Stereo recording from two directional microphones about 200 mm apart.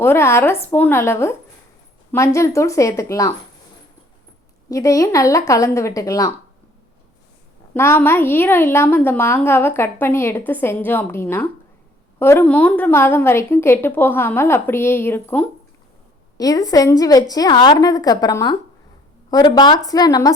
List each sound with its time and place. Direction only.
0.0 s a woman's voice: 10° left (ahead or behind)
4.7 s a woman's voice: 15° left (ahead or behind)
7.7 s a woman's voice: 10° left (ahead or behind)